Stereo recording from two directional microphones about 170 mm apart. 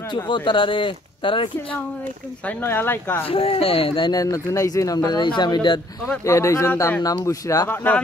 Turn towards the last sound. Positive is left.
turn(degrees=10)  # may be behind; listen again after turning